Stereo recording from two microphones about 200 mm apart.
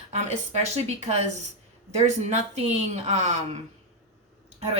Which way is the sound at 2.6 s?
35° right (ahead or behind).